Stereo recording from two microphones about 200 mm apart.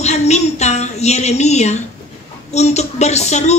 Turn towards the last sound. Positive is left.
turn(degrees=35)  # may be behind; listen again after turning